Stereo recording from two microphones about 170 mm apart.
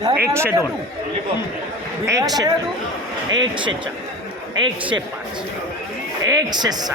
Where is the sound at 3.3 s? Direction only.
25° right (ahead or behind).